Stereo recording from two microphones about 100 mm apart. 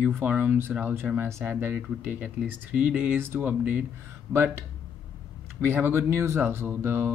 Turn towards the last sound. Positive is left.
turn(degrees=-25)  # may be behind; listen again after turning